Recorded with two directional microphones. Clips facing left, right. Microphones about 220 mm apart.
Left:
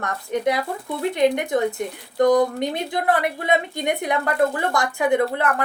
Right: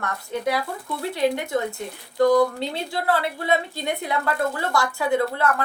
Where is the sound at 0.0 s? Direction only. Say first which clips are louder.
Left 3 dB; 20° left (ahead or behind).